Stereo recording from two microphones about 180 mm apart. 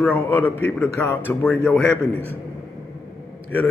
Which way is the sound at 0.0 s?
10° left (ahead or behind).